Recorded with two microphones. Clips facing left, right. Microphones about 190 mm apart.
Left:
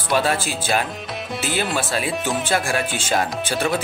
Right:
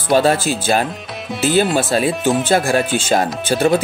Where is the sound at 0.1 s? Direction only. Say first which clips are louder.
Right 7 dB; 40° right (ahead or behind).